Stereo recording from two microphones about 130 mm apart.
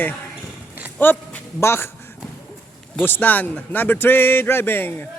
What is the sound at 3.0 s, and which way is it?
A man's voice, 15° left (ahead or behind).